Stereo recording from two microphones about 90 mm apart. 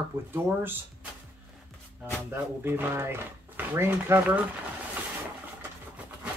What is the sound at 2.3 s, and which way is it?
Speech, 25° right (ahead or behind).